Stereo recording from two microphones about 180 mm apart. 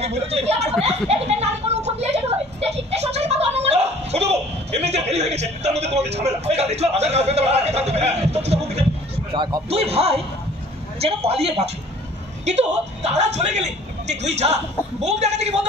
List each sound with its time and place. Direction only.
0.0 s a man's voice: 35° right (ahead or behind)